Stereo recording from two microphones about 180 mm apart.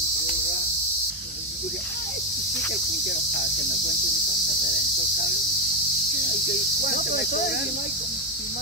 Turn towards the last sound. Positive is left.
turn(degrees=60)  # may be behind; listen again after turning